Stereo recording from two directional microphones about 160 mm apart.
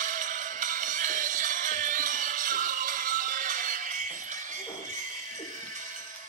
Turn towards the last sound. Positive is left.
turn(degrees=-55)  # may be behind; listen again after turning